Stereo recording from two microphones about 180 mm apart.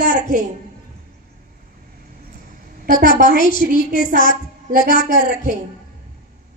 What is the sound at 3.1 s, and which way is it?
Speech, 45° right (ahead or behind).